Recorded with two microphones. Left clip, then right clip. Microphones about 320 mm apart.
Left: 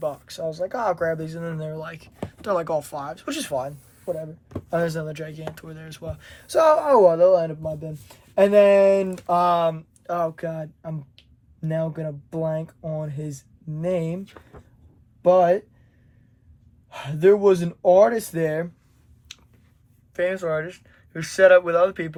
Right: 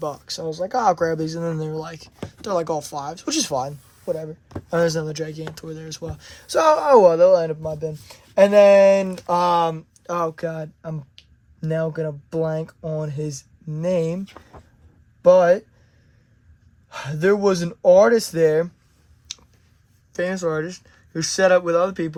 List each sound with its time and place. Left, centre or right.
0.0 s speech: centre
4.2 s speech: right
17.0 s speech: right
20.1 s speech: centre